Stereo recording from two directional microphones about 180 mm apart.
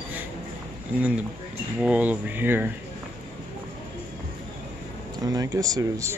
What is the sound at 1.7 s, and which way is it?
Speech, 5° right (ahead or behind).